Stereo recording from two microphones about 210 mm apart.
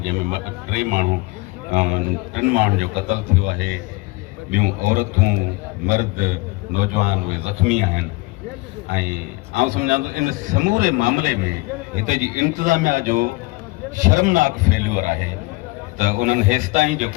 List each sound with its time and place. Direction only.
0.1 s a man's voice: 40° right (ahead or behind)
9.5 s a man's voice: 35° right (ahead or behind)